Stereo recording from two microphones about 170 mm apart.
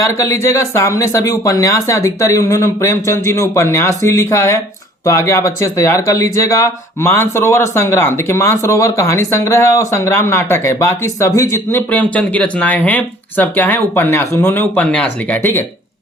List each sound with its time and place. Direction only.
0.0 s speech: 20° left (ahead or behind)